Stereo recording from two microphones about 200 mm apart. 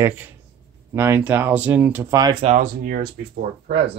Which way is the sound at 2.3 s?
35° right (ahead or behind).